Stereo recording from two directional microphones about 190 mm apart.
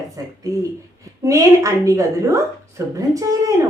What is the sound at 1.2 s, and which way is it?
A woman's voice, 15° right (ahead or behind).